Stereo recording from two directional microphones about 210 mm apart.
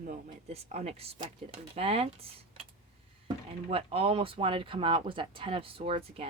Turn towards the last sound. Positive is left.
turn(degrees=-30)  # may be behind; listen again after turning